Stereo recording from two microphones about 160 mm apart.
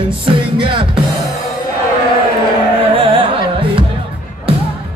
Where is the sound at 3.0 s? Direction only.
35° right (ahead or behind).